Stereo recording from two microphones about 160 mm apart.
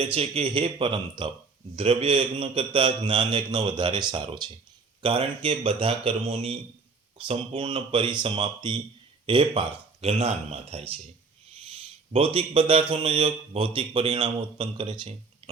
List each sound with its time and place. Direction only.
0.0 s a man's voice: 40° right (ahead or behind)
11.6 s a sound: 40° right (ahead or behind)
12.9 s a man's voice: 35° right (ahead or behind)